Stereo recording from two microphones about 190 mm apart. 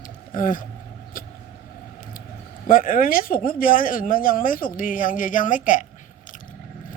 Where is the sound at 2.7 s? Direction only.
45° left (ahead or behind).